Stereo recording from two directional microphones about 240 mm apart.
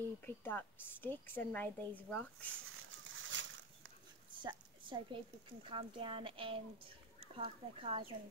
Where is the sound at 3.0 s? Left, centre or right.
Right.